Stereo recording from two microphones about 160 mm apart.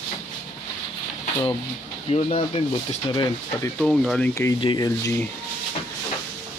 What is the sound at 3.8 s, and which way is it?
Speech, 5° left (ahead or behind).